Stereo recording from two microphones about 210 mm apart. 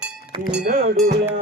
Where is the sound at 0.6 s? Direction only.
45° right (ahead or behind).